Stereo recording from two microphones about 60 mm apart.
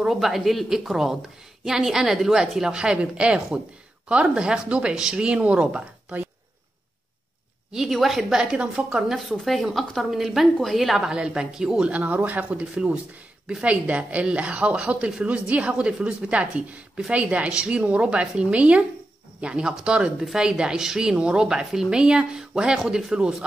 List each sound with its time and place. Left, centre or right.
0.0 s a woman's voice: centre
7.7 s a woman's voice: centre
11.1 s a woman's voice: centre
11.9 s a woman's voice: right